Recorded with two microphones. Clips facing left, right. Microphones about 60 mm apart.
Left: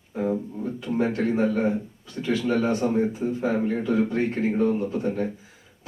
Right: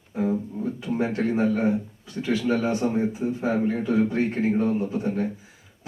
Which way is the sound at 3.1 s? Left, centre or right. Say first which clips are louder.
Even; centre.